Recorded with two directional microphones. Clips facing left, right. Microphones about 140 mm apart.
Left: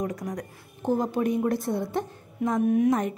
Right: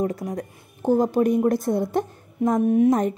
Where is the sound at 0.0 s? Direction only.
30° right (ahead or behind).